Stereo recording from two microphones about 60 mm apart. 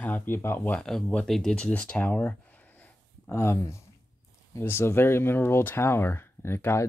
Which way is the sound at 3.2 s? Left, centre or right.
Left.